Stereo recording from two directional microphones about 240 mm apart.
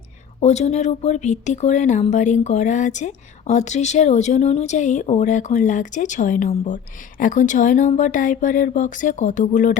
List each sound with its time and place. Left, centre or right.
0.4 s speech: left